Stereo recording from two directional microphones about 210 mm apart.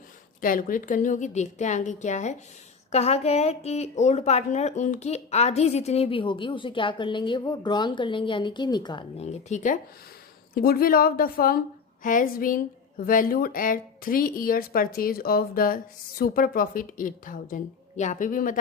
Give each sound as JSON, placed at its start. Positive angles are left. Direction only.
{"t": 0.4, "sound": "a woman's voice", "side_deg": 40}